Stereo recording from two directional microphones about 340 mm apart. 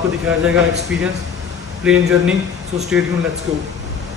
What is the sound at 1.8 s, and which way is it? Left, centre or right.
Speech, centre.